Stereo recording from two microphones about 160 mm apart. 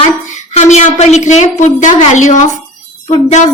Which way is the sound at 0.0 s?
45° left (ahead or behind).